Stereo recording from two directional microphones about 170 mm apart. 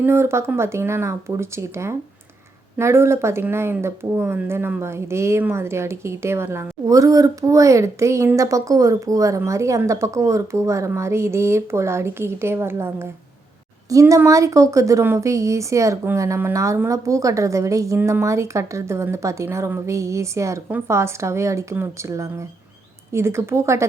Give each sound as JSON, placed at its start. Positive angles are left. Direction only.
{"t": 0.0, "sound": "speech", "side_deg": -15}